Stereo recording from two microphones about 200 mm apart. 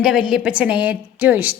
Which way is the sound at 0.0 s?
5° right (ahead or behind).